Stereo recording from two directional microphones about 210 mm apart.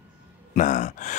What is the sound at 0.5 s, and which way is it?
Speech, 35° left (ahead or behind).